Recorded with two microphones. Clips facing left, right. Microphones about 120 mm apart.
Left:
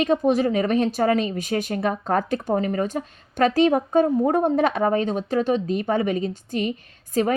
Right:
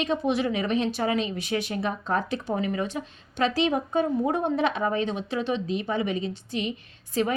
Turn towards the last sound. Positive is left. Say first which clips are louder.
# left 4 dB
turn(degrees=45)  # may be behind; listen again after turning